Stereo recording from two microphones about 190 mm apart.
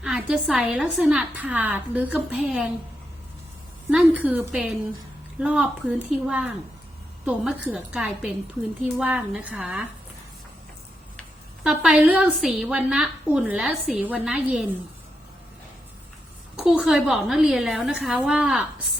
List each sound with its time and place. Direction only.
0.0 s a woman's voice: 5° right (ahead or behind)
3.8 s a woman's voice: 10° right (ahead or behind)
11.2 s a woman's voice: centre (ahead or behind)
16.6 s a woman's voice: 5° right (ahead or behind)